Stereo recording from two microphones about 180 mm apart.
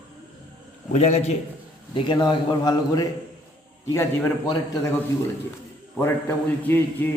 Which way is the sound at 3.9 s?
15° left (ahead or behind).